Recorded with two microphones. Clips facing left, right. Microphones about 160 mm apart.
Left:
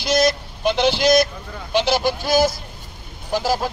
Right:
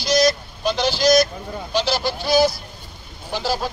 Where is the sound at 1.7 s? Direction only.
20° left (ahead or behind).